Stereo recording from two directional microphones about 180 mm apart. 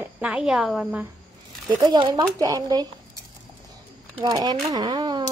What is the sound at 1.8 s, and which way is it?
A woman's voice, 25° right (ahead or behind).